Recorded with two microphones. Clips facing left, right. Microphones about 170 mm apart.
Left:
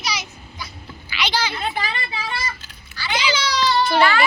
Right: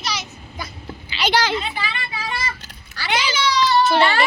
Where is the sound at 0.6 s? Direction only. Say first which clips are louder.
Right 3 dB; 50° right (ahead or behind).